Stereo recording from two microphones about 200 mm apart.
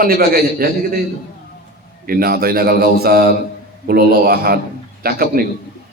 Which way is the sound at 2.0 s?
45° right (ahead or behind).